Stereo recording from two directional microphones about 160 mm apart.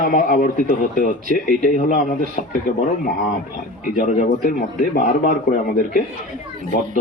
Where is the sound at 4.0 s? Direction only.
60° left (ahead or behind).